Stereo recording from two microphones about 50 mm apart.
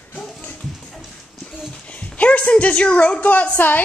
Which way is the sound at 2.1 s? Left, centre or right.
Left.